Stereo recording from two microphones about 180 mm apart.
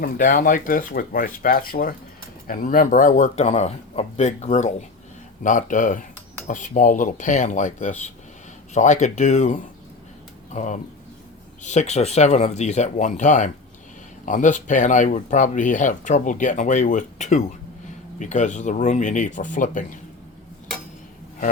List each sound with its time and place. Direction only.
0.0 s speech: 50° left (ahead or behind)